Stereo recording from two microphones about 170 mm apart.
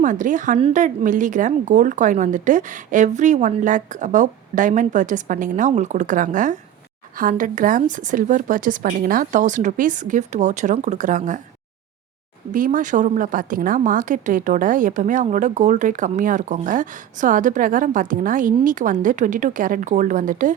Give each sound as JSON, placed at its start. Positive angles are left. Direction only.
{"t": 0.0, "sound": "speech", "side_deg": -50}
{"t": 12.5, "sound": "speech", "side_deg": -50}